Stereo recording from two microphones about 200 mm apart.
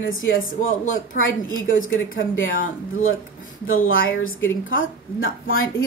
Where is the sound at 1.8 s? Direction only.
75° left (ahead or behind).